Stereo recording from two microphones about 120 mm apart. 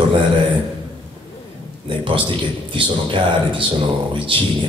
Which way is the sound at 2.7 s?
45° right (ahead or behind).